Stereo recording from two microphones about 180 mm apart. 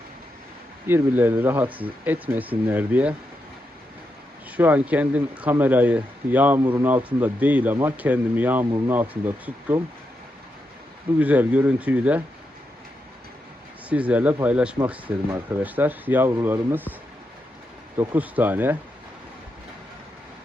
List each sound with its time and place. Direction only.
0.9 s speech: 10° right (ahead or behind)
4.5 s speech: 10° right (ahead or behind)
11.2 s speech: 10° right (ahead or behind)
13.9 s speech: 10° right (ahead or behind)
18.1 s speech: 10° right (ahead or behind)